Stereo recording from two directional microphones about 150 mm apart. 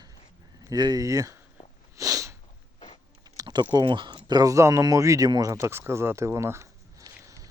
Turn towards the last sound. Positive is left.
turn(degrees=-20)  # may be behind; listen again after turning